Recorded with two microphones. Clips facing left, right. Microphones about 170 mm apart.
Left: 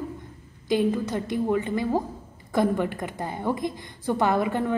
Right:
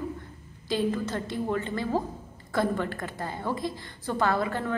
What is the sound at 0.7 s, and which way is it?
A woman's voice, 15° left (ahead or behind).